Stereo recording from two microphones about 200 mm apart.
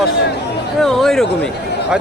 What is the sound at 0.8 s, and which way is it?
Speech, centre (ahead or behind).